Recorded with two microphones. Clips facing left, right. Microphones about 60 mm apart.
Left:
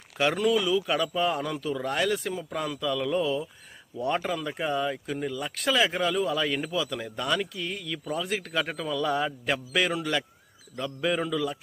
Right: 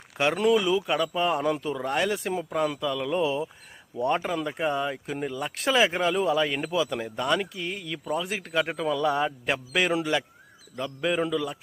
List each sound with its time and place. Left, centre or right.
0.3 s speech: right
0.9 s a man's voice: centre
1.4 s speech: right
2.2 s speech: right
2.5 s a man's voice: centre
3.2 s speech: right
4.4 s a man's voice: centre
6.3 s a man's voice: centre
8.3 s a man's voice: centre